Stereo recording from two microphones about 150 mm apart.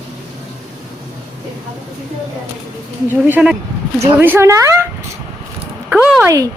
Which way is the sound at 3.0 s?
10° right (ahead or behind).